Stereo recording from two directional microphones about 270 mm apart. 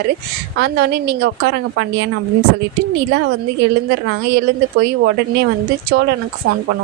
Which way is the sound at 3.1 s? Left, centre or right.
Right.